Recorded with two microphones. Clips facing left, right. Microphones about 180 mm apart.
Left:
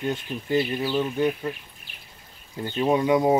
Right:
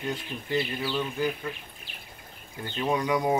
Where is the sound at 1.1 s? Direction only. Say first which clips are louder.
Left 5 dB; 30° left (ahead or behind).